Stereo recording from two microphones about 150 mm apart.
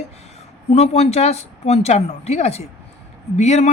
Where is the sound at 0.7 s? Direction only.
45° left (ahead or behind).